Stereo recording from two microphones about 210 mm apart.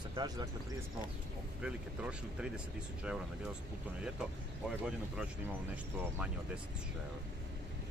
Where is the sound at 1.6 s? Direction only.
5° right (ahead or behind).